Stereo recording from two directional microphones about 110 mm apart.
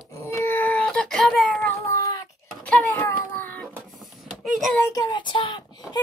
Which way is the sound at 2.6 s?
15° left (ahead or behind).